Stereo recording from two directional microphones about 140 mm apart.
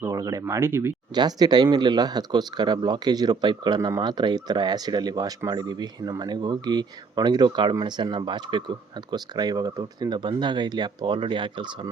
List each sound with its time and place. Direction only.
0.0 s speech: 25° right (ahead or behind)
1.1 s speech: 30° right (ahead or behind)